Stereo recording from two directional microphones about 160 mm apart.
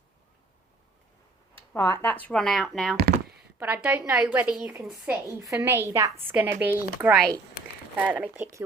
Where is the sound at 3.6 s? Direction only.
10° right (ahead or behind).